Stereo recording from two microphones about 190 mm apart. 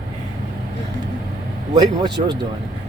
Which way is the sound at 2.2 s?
35° right (ahead or behind).